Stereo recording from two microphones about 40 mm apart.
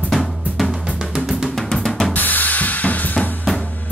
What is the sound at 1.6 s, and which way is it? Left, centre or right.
Drum, centre.